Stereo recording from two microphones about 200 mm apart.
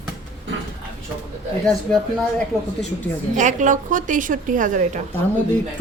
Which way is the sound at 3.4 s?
40° right (ahead or behind).